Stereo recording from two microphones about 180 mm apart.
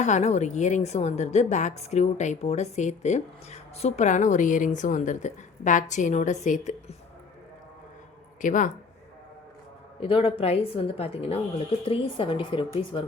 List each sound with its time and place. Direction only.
0.0 s a woman's voice: 40° left (ahead or behind)
8.4 s speech: 45° left (ahead or behind)
10.0 s a woman's voice: 30° left (ahead or behind)